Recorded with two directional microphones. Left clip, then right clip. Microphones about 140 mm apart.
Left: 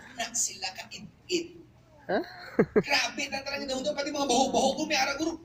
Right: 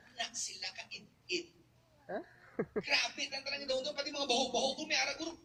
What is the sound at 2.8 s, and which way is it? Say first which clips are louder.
Speech: left 7 dB; 15° left (ahead or behind).